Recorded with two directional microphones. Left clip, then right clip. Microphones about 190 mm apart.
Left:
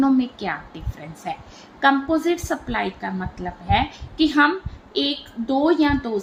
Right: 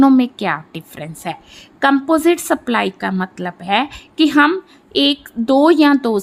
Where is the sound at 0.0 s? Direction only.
55° right (ahead or behind).